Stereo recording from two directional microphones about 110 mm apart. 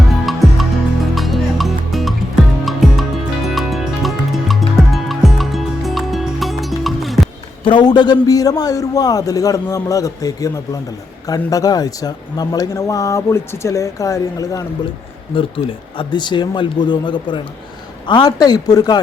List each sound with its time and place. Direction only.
0.1 s music: centre (ahead or behind)
7.6 s speech: 45° left (ahead or behind); by 14.6 s 30° left (ahead or behind)
15.4 s speech: 50° left (ahead or behind)